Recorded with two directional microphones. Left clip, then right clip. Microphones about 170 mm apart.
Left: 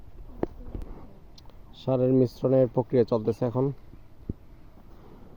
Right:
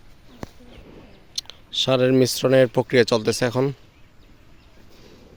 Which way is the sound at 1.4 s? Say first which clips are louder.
Right 9 dB; 25° right (ahead or behind).